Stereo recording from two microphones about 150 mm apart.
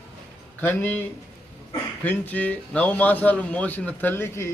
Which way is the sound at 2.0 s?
10° left (ahead or behind).